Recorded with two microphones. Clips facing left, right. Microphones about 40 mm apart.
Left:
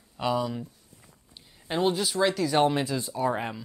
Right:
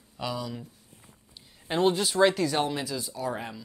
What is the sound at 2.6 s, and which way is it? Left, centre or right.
Speech, left.